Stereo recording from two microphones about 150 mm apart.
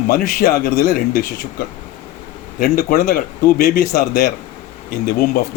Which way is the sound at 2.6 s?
85° left.